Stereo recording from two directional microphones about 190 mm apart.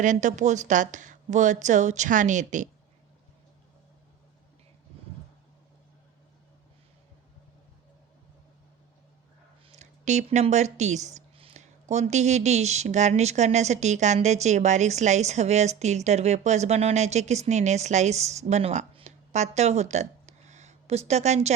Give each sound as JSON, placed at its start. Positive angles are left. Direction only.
{"t": 0.0, "sound": "speech", "side_deg": -40}
{"t": 9.6, "sound": "speech", "side_deg": -40}